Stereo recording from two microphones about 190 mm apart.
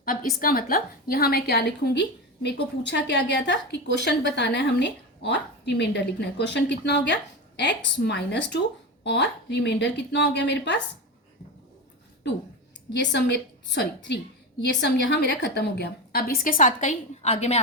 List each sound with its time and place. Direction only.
0.0 s a woman's voice: 45° left (ahead or behind); by 10.8 s 65° left (ahead or behind)
12.9 s a woman's voice: 65° left (ahead or behind); by 17.6 s 35° left (ahead or behind)